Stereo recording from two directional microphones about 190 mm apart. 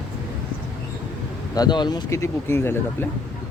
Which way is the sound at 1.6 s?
25° left (ahead or behind).